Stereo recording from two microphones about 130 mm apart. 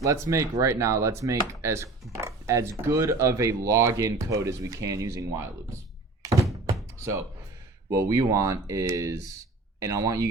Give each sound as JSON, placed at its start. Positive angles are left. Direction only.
{"t": 0.0, "sound": "speech", "side_deg": -25}
{"t": 2.1, "sound": "a sound", "side_deg": -25}
{"t": 2.8, "sound": "speech", "side_deg": -25}
{"t": 6.2, "sound": "thunk", "side_deg": -25}
{"t": 7.0, "sound": "speech", "side_deg": -25}